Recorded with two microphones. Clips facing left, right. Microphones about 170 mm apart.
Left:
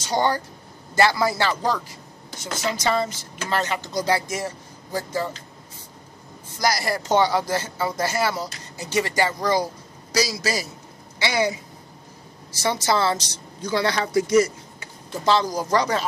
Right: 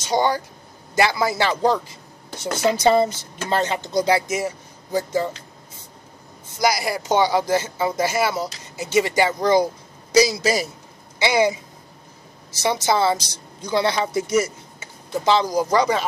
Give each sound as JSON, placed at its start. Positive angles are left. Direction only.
{"t": 0.1, "sound": "speech", "side_deg": -15}
{"t": 6.6, "sound": "speech", "side_deg": -15}
{"t": 12.6, "sound": "speech", "side_deg": -15}